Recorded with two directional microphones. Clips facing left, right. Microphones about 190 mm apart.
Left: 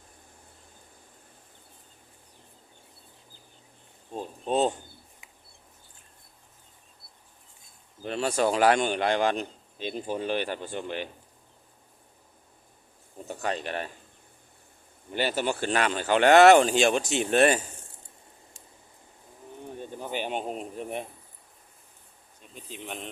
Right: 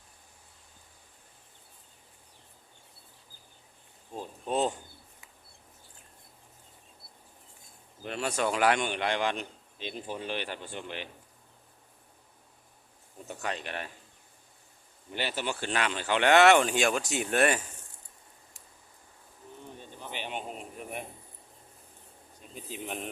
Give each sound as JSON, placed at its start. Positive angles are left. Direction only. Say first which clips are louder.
{"t": 4.1, "sound": "a sound", "louder": "left 4 dB", "side_deg": 25}
{"t": 8.0, "sound": "a man's voice", "louder": "left 5 dB", "side_deg": 35}
{"t": 13.2, "sound": "speech", "louder": "left 5 dB", "side_deg": 35}
{"t": 15.1, "sound": "a man's voice", "louder": "left 6 dB", "side_deg": 45}
{"t": 19.8, "sound": "a sound", "louder": "left 8 dB", "side_deg": 45}
{"t": 22.5, "sound": "speech", "louder": "right 1 dB", "side_deg": -5}